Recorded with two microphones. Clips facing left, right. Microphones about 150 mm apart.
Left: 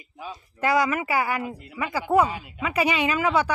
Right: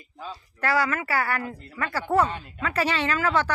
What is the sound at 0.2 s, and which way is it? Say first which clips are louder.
Speech: left 3 dB; 15° left (ahead or behind).